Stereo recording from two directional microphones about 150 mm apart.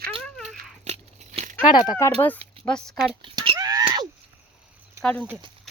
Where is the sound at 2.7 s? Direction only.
5° left (ahead or behind).